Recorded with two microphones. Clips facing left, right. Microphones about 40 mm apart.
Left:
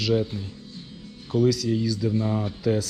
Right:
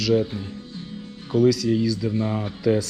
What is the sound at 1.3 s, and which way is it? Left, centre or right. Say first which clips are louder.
Speech: right 3 dB; centre.